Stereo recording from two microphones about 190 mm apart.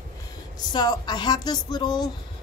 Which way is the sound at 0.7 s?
20° left (ahead or behind).